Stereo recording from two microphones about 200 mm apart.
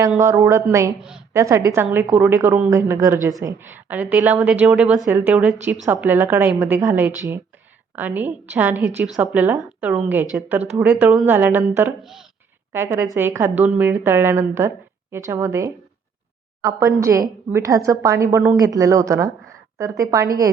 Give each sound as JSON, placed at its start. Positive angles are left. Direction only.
{"t": 0.2, "sound": "a woman's voice", "side_deg": -15}